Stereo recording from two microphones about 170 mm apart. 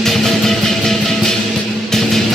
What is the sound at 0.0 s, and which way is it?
Music, centre (ahead or behind).